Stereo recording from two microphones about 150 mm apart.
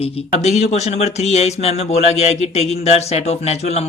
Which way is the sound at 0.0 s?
45° left (ahead or behind).